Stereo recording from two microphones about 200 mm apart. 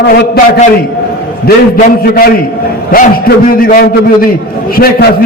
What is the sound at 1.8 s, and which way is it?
A man's voice, 50° left (ahead or behind).